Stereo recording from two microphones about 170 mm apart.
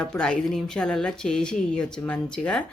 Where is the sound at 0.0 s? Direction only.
5° left (ahead or behind).